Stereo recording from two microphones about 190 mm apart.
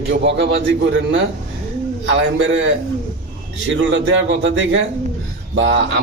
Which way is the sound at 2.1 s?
75° right (ahead or behind).